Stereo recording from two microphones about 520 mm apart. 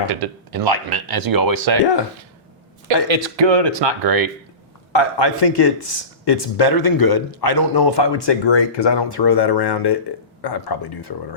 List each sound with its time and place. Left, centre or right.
0.0 s speech: right
1.8 s speech: left
3.1 s speech: right
4.9 s speech: left